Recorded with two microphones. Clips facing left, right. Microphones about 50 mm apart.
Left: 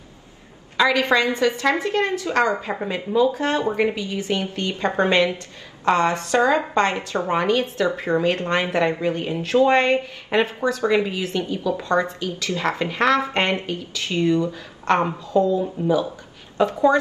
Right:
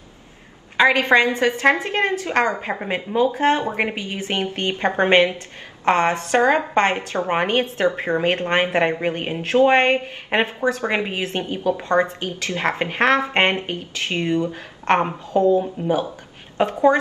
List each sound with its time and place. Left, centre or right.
0.7 s speech: right